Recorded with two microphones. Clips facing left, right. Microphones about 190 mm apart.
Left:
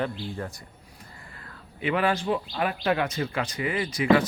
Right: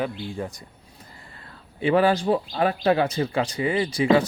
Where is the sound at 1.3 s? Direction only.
30° right (ahead or behind).